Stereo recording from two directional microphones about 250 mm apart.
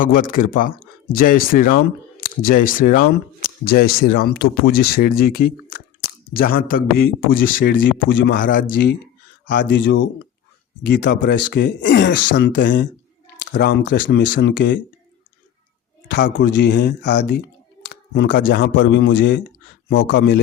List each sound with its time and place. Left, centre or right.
0.0 s speech: left
16.0 s speech: left
17.8 s a sound: left
18.6 s speech: left